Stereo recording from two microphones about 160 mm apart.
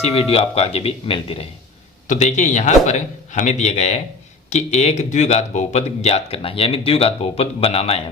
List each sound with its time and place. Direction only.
0.0 s speech: 35° left (ahead or behind)
2.0 s a man's voice: 45° left (ahead or behind)